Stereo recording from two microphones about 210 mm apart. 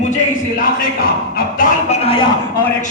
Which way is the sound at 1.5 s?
30° left (ahead or behind).